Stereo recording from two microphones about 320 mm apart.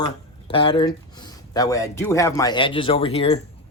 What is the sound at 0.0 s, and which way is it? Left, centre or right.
Speech, centre.